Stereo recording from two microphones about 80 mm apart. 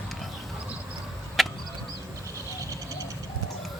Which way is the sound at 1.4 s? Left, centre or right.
Centre.